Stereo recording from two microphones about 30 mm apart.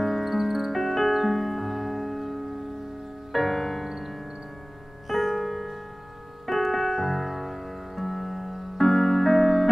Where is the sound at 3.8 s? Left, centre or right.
Centre.